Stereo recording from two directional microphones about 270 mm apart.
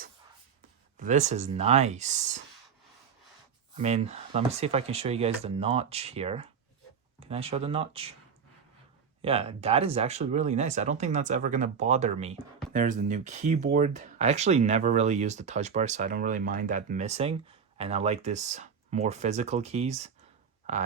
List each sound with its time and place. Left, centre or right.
0.9 s speech: right
3.8 s speech: right
9.2 s speech: right